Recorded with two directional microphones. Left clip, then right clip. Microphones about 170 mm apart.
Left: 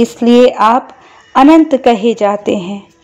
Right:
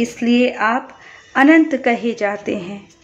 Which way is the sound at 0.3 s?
45° left (ahead or behind).